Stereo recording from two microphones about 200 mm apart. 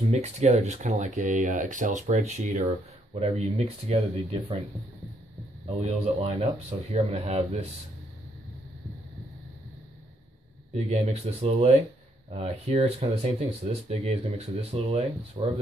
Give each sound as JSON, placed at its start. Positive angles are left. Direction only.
{"t": 0.0, "sound": "speech", "side_deg": -35}
{"t": 5.7, "sound": "speech", "side_deg": -30}
{"t": 10.7, "sound": "speech", "side_deg": -35}